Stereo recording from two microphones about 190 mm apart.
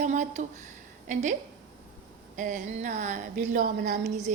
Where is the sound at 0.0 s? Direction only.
40° right (ahead or behind).